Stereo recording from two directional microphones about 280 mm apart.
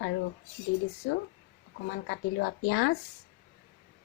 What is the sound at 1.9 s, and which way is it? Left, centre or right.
A woman's voice, left.